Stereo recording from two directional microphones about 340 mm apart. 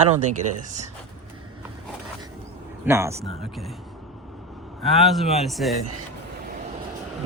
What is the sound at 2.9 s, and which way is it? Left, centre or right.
Speech, centre.